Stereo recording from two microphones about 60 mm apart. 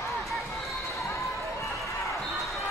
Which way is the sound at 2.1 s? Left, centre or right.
Centre.